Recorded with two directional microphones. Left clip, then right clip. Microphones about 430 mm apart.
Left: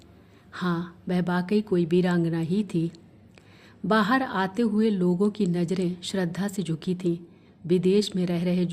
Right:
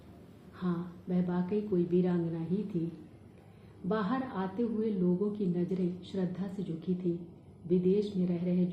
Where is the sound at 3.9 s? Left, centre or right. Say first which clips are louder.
Left 11 dB; left.